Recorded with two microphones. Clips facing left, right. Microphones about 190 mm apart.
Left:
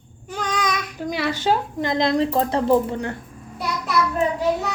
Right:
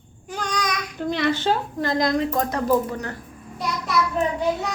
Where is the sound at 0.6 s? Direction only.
5° left (ahead or behind); by 3.2 s 25° left (ahead or behind).